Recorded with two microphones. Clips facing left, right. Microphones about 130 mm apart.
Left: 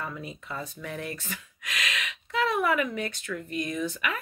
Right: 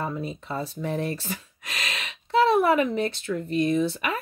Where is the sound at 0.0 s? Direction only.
30° right (ahead or behind).